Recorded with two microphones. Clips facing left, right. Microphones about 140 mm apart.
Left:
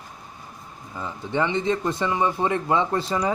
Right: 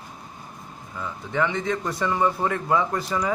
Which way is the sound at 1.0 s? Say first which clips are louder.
Left 1 dB; 25° left (ahead or behind).